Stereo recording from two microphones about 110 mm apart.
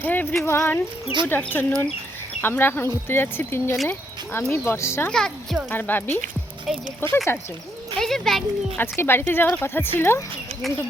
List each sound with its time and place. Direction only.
0.0 s speech: 15° left (ahead or behind)
3.8 s a sound: 20° left (ahead or behind)
4.5 s speech: 20° left (ahead or behind)
5.1 s speech: 5° left (ahead or behind)
5.7 s speech: 20° left (ahead or behind)
6.7 s speech: centre (ahead or behind)
7.0 s speech: 25° left (ahead or behind)
7.9 s speech: 5° left (ahead or behind)
8.8 s speech: 20° left (ahead or behind)